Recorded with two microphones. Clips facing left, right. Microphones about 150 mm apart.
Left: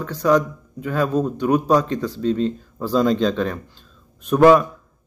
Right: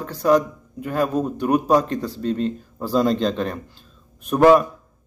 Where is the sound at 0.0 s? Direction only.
40° right (ahead or behind).